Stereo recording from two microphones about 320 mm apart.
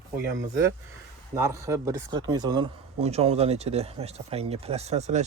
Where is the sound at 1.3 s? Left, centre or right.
Centre.